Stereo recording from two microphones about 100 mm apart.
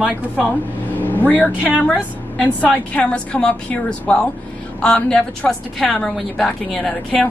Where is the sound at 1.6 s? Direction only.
15° left (ahead or behind).